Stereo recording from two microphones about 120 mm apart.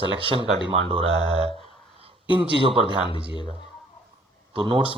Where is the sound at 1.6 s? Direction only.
50° right (ahead or behind).